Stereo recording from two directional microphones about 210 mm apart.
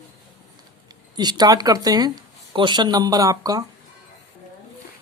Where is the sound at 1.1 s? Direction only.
20° right (ahead or behind).